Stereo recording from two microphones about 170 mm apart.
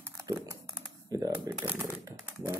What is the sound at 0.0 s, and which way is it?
Typing, 15° right (ahead or behind).